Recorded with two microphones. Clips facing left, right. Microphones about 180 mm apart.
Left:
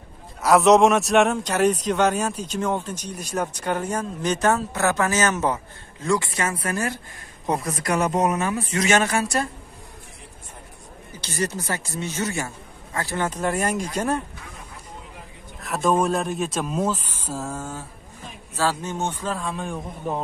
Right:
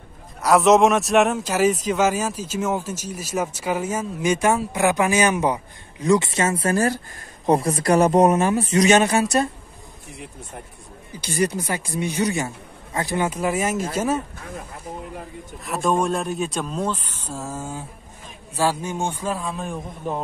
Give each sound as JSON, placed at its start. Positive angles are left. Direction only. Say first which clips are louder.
{"t": 0.4, "sound": "speech", "louder": "even", "side_deg": 0}
{"t": 11.1, "sound": "a man's voice", "louder": "right 5 dB", "side_deg": -15}
{"t": 15.6, "sound": "speech", "louder": "even", "side_deg": 0}
{"t": 17.4, "sound": "a man's voice", "louder": "right 2 dB", "side_deg": -5}